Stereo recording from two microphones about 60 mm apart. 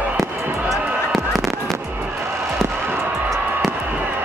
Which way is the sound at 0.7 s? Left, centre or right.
Centre.